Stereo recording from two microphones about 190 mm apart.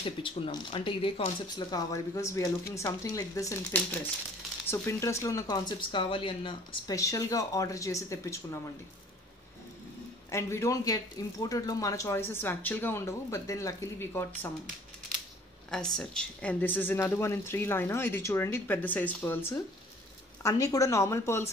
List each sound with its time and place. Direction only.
0.0 s speech: 25° left (ahead or behind)
10.3 s speech: 15° left (ahead or behind)
15.7 s speech: 5° left (ahead or behind)